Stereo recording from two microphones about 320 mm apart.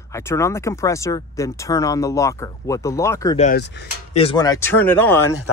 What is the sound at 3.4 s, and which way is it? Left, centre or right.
Speech, left.